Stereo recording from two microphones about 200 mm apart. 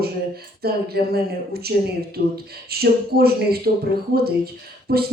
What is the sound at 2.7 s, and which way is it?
Speech, 50° right (ahead or behind).